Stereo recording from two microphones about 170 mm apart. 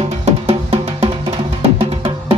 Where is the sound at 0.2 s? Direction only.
35° right (ahead or behind).